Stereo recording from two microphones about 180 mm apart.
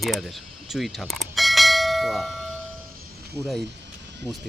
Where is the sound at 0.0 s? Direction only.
Centre (ahead or behind).